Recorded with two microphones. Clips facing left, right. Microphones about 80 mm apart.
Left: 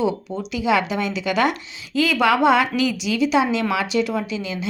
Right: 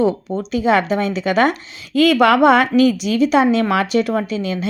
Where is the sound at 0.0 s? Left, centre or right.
Right.